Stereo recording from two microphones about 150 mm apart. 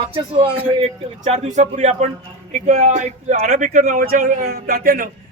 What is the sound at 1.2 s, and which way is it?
Speech, 45° right (ahead or behind).